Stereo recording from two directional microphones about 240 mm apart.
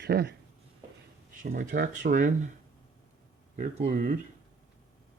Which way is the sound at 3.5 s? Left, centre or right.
Right.